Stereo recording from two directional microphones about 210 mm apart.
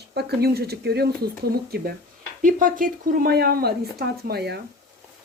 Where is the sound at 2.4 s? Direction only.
40° right (ahead or behind).